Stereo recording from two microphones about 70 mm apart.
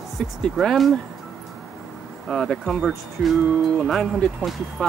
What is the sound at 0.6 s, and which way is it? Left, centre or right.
Speech, centre.